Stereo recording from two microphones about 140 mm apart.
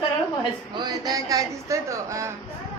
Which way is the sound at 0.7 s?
30° right (ahead or behind).